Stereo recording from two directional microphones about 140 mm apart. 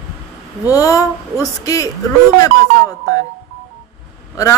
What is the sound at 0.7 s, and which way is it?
Speech, 25° left (ahead or behind).